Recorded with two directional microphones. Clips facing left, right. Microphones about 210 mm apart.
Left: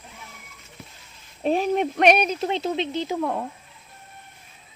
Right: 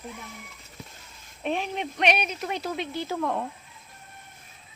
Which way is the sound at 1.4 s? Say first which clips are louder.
Left 8 dB; 40° left (ahead or behind).